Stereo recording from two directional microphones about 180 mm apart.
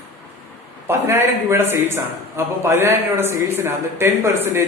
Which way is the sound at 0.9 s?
15° right (ahead or behind).